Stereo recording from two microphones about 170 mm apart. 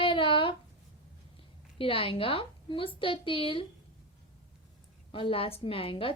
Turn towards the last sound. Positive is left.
turn(degrees=30)  # may be behind; listen again after turning